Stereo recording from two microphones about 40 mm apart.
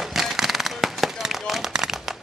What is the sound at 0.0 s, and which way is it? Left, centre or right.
Firecracker, centre.